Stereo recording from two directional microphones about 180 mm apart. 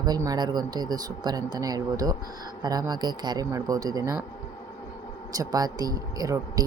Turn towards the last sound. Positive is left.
turn(degrees=-20)  # may be behind; listen again after turning